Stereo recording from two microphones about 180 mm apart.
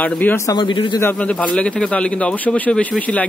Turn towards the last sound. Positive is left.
turn(degrees=5)  # may be behind; listen again after turning